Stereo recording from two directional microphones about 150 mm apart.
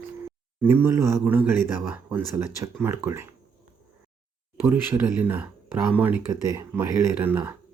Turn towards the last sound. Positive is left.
turn(degrees=-15)  # may be behind; listen again after turning